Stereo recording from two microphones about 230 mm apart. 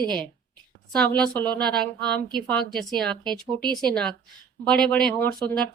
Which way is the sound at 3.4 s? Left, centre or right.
Centre.